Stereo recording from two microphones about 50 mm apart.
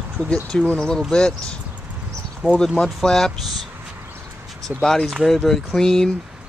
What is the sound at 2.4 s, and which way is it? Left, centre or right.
Speech, left.